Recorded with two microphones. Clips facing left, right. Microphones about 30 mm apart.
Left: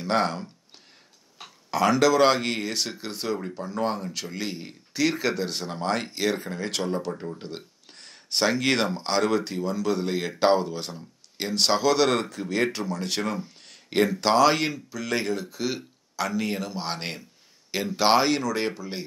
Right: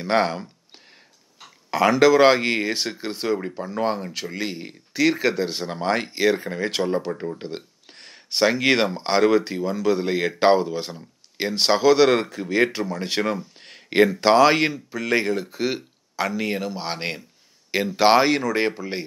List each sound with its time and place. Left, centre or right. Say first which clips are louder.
0.0 s speech: right 3 dB; centre
1.7 s speech: right 4 dB; centre